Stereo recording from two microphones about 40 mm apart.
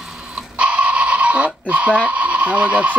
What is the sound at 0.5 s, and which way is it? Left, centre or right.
Goat, right.